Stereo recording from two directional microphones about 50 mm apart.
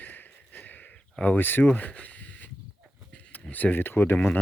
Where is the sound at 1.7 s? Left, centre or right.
Left.